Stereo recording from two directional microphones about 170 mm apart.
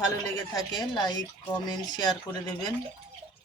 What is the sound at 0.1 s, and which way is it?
A woman's voice, 20° left (ahead or behind).